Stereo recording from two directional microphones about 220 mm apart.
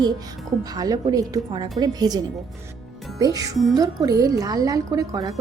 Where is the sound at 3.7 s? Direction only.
15° right (ahead or behind).